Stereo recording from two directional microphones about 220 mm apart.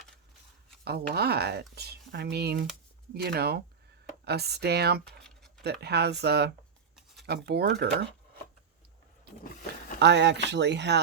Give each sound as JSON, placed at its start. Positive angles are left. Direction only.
{"t": 0.9, "sound": "speech", "side_deg": -45}
{"t": 5.2, "sound": "a sound", "side_deg": 0}
{"t": 5.8, "sound": "speech", "side_deg": -50}
{"t": 10.0, "sound": "speech", "side_deg": -50}